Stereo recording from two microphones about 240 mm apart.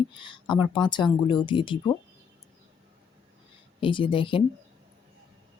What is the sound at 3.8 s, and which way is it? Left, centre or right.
Speech, left.